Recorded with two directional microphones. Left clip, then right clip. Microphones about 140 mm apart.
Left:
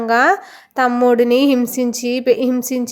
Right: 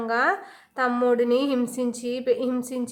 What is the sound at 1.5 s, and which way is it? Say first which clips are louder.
A woman's voice: left 8 dB; 35° left (ahead or behind).